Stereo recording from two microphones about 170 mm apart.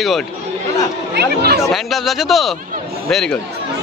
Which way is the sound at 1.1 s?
70° right (ahead or behind).